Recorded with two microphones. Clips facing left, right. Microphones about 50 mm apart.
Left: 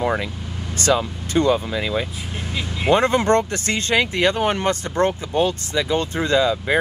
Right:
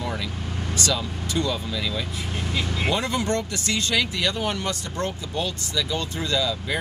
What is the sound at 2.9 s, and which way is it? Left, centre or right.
Speech, left.